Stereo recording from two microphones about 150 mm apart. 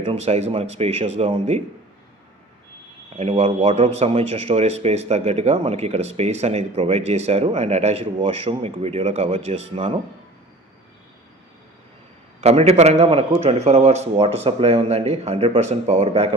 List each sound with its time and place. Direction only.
0.0 s speech: 40° right (ahead or behind)
3.2 s speech: 40° right (ahead or behind)
12.4 s speech: 45° right (ahead or behind)